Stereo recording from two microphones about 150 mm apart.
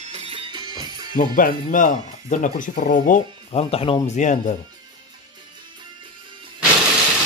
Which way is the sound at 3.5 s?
40° left (ahead or behind).